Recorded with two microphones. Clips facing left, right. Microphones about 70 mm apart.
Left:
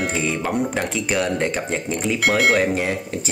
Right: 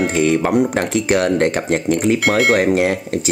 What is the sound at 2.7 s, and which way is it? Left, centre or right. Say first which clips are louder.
Speech: right 6 dB; right.